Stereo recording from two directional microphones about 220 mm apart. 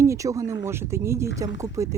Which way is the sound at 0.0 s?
15° right (ahead or behind).